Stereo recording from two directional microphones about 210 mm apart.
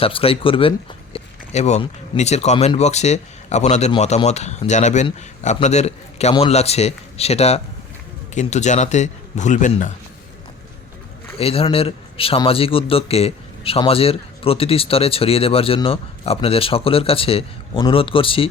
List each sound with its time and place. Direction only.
0.0 s speech: 25° left (ahead or behind)
11.3 s speech: 25° left (ahead or behind)